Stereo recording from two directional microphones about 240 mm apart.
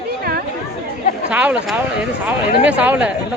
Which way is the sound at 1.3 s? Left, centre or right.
Centre.